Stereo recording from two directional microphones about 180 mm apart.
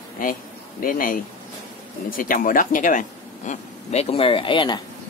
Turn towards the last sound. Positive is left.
turn(degrees=25)  # may be behind; listen again after turning